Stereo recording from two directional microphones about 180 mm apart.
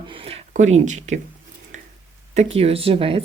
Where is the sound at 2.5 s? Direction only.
35° right (ahead or behind).